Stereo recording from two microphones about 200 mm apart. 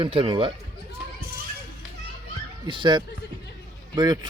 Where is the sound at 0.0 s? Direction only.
25° right (ahead or behind).